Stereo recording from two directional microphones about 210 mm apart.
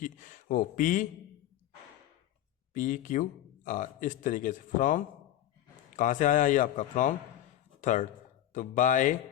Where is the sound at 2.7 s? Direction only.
40° left (ahead or behind).